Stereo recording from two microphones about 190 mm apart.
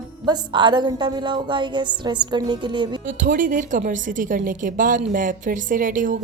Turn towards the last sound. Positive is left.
turn(degrees=-45)  # may be behind; listen again after turning